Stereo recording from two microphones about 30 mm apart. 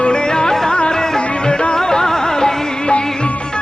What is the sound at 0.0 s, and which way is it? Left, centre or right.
Music, left.